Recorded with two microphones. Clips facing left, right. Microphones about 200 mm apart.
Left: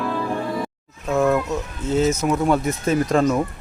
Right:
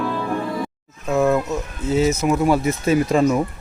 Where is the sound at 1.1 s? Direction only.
5° right (ahead or behind).